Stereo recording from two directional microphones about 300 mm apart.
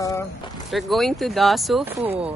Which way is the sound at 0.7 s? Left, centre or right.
Centre.